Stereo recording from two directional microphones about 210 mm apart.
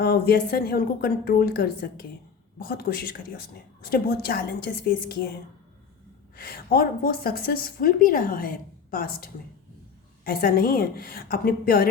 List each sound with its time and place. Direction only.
0.0 s a woman's voice: 45° left (ahead or behind)
6.3 s a woman's voice: 45° left (ahead or behind)